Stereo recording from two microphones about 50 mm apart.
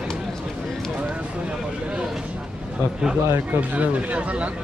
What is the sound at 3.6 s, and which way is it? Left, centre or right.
Speech, right.